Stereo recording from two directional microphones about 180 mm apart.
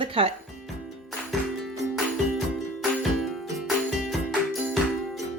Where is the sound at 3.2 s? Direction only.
Centre (ahead or behind).